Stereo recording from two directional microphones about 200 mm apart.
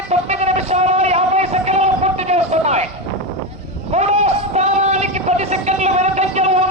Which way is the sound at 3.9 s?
35° right (ahead or behind).